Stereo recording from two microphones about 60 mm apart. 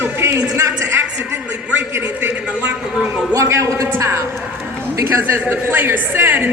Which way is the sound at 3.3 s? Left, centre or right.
Right.